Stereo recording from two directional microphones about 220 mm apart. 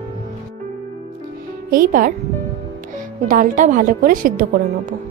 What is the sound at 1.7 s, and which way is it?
Speech, 40° right (ahead or behind).